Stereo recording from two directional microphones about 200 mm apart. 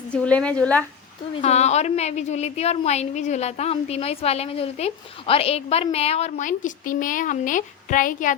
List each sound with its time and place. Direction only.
0.1 s a woman's voice: 5° left (ahead or behind)
1.4 s a woman's voice: 35° left (ahead or behind)